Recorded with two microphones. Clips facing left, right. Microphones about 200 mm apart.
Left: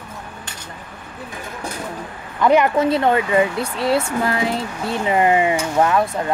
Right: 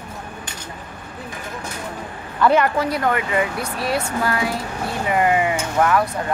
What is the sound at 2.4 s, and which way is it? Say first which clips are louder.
Speech: left 2 dB; 20° left (ahead or behind).